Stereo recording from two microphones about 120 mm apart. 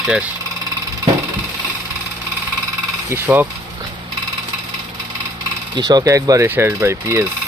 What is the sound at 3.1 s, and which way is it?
Speech, 15° right (ahead or behind).